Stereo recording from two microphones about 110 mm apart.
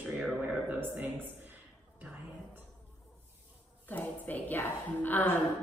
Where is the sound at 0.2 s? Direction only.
10° right (ahead or behind).